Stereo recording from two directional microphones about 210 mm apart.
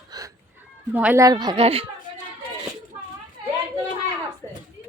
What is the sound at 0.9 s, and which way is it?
Speech, 10° right (ahead or behind).